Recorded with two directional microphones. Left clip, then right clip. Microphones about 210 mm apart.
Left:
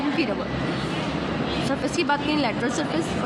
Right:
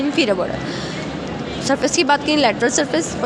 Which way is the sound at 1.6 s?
35° right (ahead or behind).